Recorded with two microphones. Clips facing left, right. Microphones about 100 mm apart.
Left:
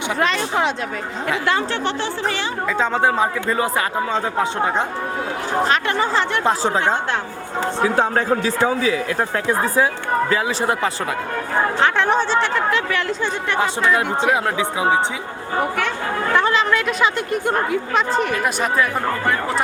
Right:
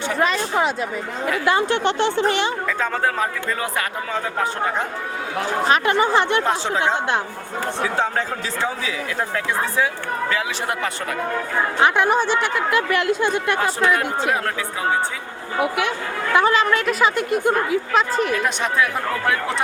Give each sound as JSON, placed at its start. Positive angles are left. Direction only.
{"t": 0.2, "sound": "a woman's voice", "side_deg": -5}
{"t": 1.5, "sound": "speech", "side_deg": -15}
{"t": 2.7, "sound": "speech", "side_deg": 25}
{"t": 5.6, "sound": "speech", "side_deg": -10}
{"t": 7.9, "sound": "a man's voice", "side_deg": 55}
{"t": 9.5, "sound": "speech", "side_deg": 40}
{"t": 11.8, "sound": "speech", "side_deg": -10}
{"t": 16.3, "sound": "a woman's voice", "side_deg": -10}